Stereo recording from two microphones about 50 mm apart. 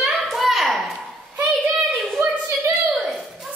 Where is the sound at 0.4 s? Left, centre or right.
Centre.